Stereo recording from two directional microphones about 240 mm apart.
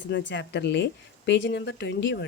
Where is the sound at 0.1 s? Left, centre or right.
Left.